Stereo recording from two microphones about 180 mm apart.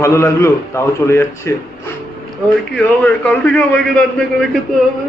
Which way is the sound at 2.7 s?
5° left (ahead or behind).